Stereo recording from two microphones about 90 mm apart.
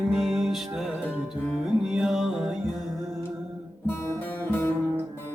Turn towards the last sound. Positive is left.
turn(degrees=25)  # may be behind; listen again after turning